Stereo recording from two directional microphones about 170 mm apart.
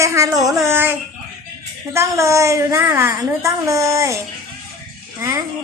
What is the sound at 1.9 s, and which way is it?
A woman's voice, 15° right (ahead or behind).